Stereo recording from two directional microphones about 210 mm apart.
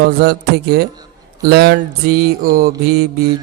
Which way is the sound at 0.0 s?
50° right (ahead or behind).